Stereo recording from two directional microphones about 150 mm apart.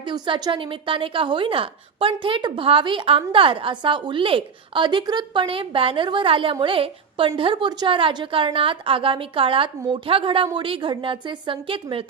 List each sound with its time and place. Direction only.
0.0 s a woman's voice: 30° right (ahead or behind)